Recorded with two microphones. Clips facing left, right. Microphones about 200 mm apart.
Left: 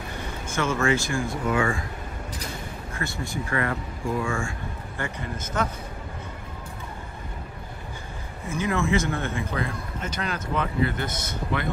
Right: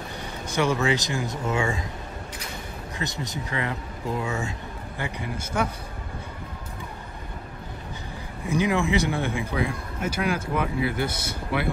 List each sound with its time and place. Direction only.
0.6 s speech: 15° right (ahead or behind)
2.9 s speech: 20° right (ahead or behind)
8.5 s speech: 15° right (ahead or behind)